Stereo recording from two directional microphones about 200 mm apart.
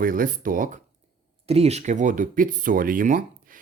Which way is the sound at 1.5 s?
30° right (ahead or behind).